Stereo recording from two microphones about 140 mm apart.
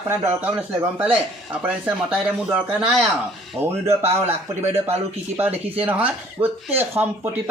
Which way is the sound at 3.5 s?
20° right (ahead or behind).